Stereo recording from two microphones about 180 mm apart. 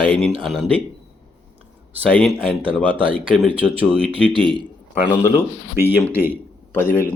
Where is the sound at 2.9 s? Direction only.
30° right (ahead or behind).